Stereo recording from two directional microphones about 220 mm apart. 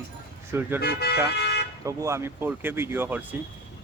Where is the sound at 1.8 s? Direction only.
15° right (ahead or behind).